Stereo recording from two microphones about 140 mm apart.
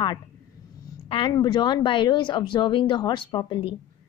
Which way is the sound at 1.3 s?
30° left (ahead or behind).